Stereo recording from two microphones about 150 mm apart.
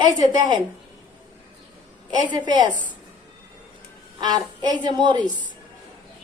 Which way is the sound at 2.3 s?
30° right (ahead or behind).